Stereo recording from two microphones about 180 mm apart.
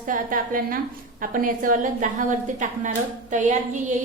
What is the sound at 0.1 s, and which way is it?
A woman's voice, 50° right (ahead or behind).